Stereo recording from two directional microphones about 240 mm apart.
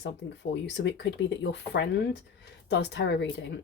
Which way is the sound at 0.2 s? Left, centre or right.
Left.